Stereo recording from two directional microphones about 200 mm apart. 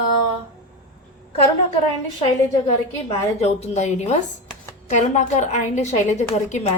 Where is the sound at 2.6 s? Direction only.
30° left (ahead or behind).